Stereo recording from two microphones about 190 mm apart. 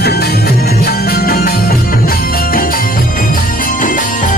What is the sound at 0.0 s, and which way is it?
Music, 55° left (ahead or behind).